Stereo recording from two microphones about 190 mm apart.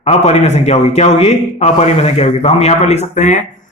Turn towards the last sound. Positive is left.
turn(degrees=40)  # may be behind; listen again after turning